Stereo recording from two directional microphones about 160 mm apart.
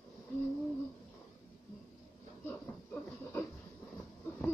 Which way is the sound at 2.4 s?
10° left (ahead or behind).